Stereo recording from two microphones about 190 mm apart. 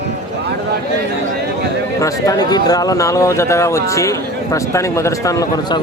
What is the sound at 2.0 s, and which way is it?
A man's voice, 20° left (ahead or behind).